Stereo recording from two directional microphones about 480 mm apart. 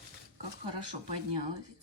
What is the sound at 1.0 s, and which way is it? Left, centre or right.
Speech, right.